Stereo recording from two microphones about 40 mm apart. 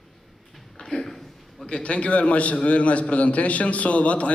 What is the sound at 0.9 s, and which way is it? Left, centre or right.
A man's voice, left.